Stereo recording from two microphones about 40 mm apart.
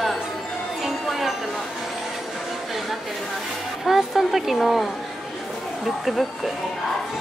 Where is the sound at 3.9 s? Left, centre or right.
Centre.